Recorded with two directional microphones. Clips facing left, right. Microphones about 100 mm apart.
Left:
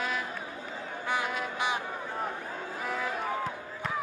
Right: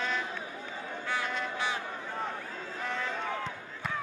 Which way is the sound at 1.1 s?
10° left (ahead or behind).